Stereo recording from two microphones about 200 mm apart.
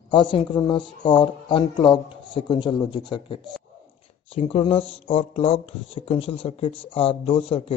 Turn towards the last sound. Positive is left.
turn(degrees=25)  # may be behind; listen again after turning